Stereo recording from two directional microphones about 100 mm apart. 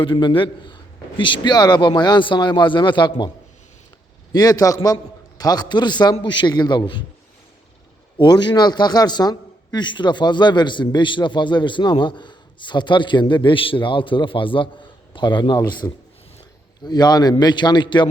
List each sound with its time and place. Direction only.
0.0 s a man's voice: 55° left (ahead or behind)
4.3 s a man's voice: 40° left (ahead or behind)
8.2 s a man's voice: 50° left (ahead or behind)